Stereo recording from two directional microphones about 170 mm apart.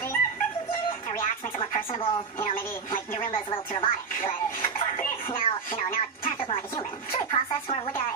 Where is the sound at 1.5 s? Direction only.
30° left (ahead or behind).